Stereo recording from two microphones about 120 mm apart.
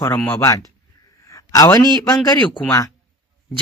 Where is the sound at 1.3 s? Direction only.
30° left (ahead or behind).